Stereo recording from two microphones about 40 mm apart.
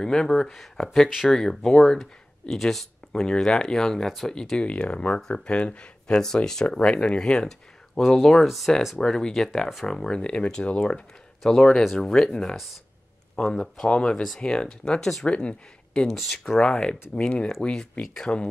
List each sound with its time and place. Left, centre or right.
0.0 s speech: centre
4.6 s speech: left
6.2 s speech: centre
8.1 s speech: centre
8.5 s speech: centre
8.9 s speech: centre
9.8 s speech: centre
11.4 s speech: centre
11.8 s speech: centre
12.1 s speech: centre
15.0 s speech: centre
15.2 s speech: left
16.1 s speech: centre
16.6 s speech: left